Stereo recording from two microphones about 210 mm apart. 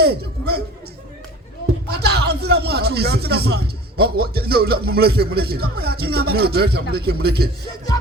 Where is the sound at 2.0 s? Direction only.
50° right (ahead or behind).